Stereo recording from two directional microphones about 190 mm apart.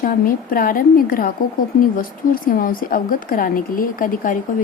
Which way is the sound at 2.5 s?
50° left (ahead or behind).